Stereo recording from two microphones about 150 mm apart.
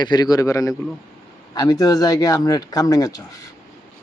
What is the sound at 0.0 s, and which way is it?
Speech, 25° left (ahead or behind).